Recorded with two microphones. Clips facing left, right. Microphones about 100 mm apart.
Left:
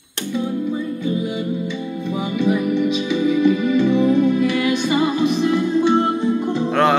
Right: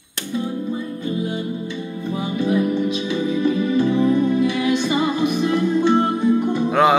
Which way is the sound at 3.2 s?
70° left (ahead or behind).